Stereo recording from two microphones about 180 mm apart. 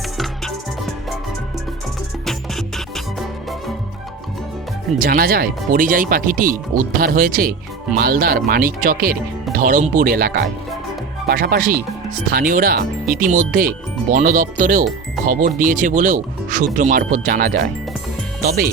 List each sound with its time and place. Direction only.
2.2 s music: centre (ahead or behind)
4.9 s speech: 55° right (ahead or behind)